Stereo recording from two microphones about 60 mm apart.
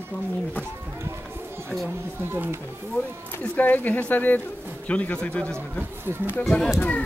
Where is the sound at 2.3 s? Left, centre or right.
Right.